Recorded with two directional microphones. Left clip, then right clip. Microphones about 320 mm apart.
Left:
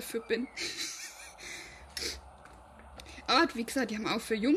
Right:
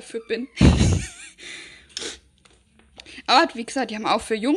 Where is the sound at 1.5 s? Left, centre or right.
Right.